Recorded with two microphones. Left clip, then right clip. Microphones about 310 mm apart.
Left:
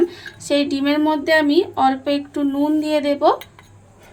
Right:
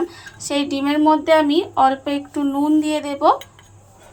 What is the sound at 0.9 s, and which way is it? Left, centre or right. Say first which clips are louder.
Speech: right 4 dB; right.